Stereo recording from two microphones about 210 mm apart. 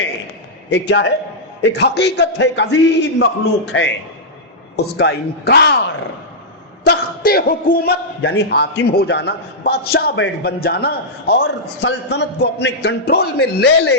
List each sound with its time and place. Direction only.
0.7 s a man's voice: 55° left (ahead or behind)
4.9 s a man's voice: 50° left (ahead or behind)